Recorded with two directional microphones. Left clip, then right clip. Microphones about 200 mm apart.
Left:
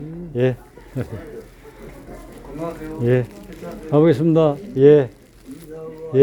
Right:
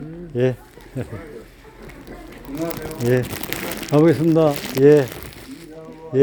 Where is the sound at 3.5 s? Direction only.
55° right (ahead or behind).